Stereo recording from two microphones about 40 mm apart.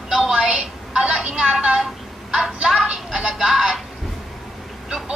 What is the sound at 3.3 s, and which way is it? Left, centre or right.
Speech, centre.